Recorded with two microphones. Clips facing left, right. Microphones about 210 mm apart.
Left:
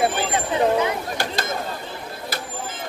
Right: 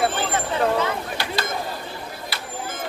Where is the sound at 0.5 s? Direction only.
15° left (ahead or behind).